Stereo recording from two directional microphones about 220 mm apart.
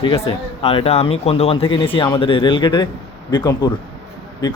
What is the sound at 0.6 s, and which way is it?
Speech, 25° left (ahead or behind).